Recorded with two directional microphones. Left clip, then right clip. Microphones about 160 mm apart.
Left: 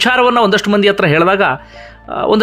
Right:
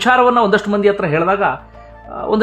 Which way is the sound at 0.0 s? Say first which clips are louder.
Left 1 dB; 10° left (ahead or behind).